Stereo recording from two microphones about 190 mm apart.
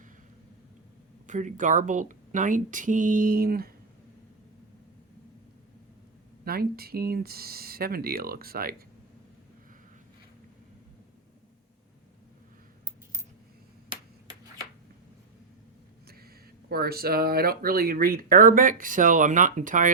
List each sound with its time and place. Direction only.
1.3 s speech: 40° right (ahead or behind)
6.4 s speech: 50° right (ahead or behind)
16.6 s speech: 55° right (ahead or behind)